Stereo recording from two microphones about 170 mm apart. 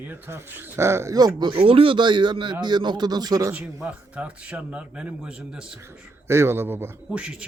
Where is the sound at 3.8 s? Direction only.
5° right (ahead or behind).